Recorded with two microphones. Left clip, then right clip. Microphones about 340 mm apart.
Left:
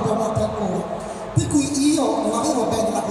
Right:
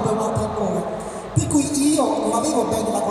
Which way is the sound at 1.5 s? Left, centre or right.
Right.